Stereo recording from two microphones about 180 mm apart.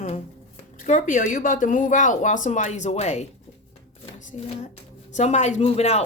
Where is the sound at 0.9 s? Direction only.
45° left (ahead or behind).